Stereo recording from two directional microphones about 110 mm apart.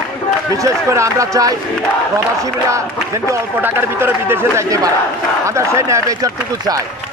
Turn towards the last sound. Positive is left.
turn(degrees=-30)  # may be behind; listen again after turning